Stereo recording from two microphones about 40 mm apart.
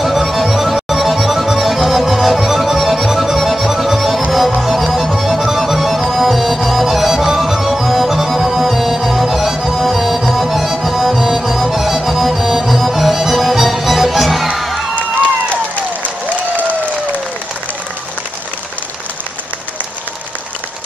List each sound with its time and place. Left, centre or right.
0.0 s music: centre
15.5 s applause: left